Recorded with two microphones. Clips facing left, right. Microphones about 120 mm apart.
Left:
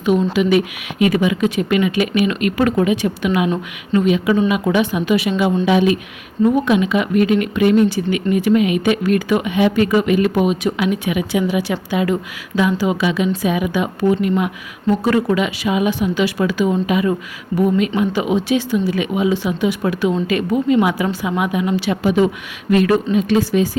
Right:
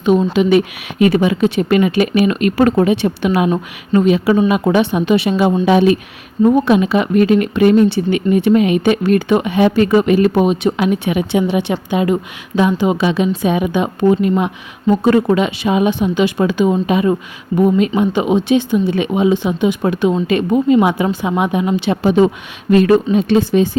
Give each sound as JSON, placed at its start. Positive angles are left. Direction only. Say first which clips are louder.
{"t": 0.0, "sound": "a woman's voice", "louder": "right 3 dB", "side_deg": -25}
{"t": 0.9, "sound": "a woman's voice", "louder": "right 3 dB", "side_deg": -40}
{"t": 13.0, "sound": "a woman's voice", "louder": "right 2 dB", "side_deg": -35}